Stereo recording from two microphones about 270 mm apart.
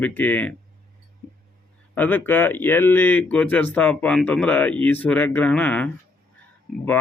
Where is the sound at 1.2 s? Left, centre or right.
Centre.